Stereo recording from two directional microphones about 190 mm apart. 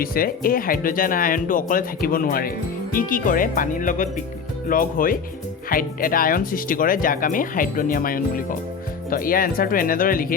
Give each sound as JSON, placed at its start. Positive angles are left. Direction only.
{"t": 0.0, "sound": "speech", "side_deg": 50}